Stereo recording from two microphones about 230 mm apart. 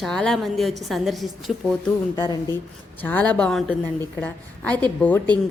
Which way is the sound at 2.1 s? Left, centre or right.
Centre.